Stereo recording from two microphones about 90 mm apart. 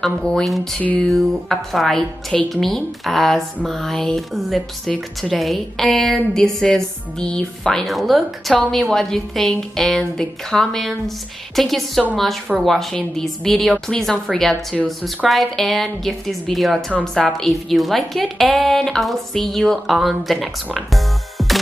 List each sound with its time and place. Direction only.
0.0 s a woman's voice: 5° left (ahead or behind)
0.7 s a sound: 15° left (ahead or behind)
1.0 s a woman's voice: centre (ahead or behind)